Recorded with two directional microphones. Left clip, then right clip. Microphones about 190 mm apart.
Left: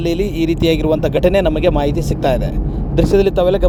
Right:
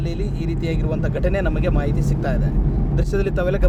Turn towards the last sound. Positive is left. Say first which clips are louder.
# left 9 dB
turn(degrees=15)  # may be behind; listen again after turning